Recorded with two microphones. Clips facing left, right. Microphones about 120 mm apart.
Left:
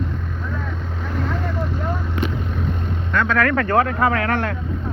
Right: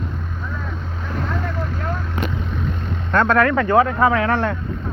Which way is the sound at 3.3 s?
20° right (ahead or behind).